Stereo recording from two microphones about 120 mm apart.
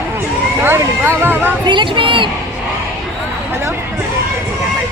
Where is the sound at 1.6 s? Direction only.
40° right (ahead or behind).